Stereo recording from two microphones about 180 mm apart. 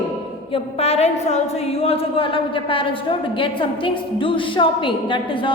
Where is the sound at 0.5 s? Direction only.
35° left (ahead or behind).